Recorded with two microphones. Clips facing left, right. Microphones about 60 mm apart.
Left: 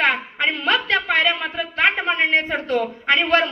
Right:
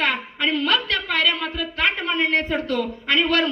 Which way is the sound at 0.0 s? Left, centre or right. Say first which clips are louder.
Left 3 dB; left.